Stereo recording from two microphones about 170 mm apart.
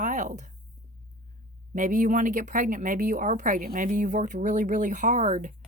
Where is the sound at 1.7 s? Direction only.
50° right (ahead or behind).